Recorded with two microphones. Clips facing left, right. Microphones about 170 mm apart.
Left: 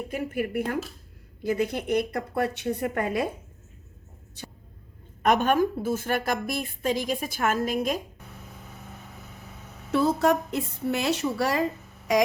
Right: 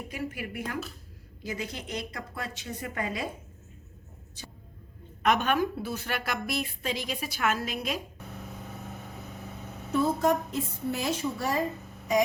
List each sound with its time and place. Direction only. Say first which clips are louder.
0.1 s a woman's voice: left 8 dB; 50° left (ahead or behind)
5.2 s a woman's voice: left 4 dB; 45° left (ahead or behind)
9.9 s a woman's voice: left 3 dB; 85° left